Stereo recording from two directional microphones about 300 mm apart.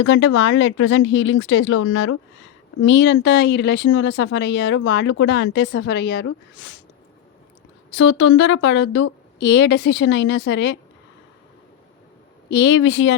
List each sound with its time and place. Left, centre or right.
0.0 s speech: left
7.9 s speech: left
12.5 s speech: left